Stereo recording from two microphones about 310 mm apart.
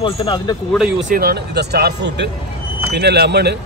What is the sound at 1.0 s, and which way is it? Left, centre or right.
Speech, right.